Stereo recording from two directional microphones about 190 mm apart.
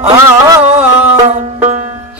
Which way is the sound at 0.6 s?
5° right (ahead or behind).